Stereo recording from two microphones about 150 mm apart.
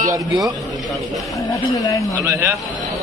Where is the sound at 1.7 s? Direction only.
25° left (ahead or behind).